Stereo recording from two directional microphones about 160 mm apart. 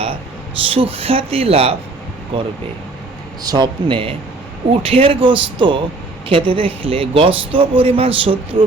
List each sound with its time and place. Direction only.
0.5 s a man's voice: 35° right (ahead or behind)
3.4 s a man's voice: 25° right (ahead or behind)